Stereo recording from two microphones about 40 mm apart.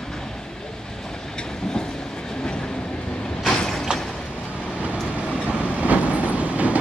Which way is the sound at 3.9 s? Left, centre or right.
Centre.